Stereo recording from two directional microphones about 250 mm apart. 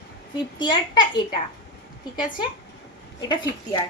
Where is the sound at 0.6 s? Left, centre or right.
Centre.